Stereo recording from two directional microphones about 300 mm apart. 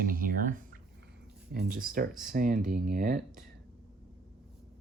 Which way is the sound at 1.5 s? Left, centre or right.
Right.